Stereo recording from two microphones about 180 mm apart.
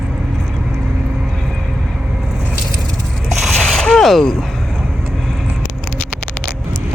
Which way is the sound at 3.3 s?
Centre (ahead or behind).